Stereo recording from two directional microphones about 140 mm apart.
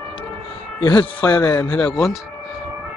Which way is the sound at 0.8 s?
35° left (ahead or behind).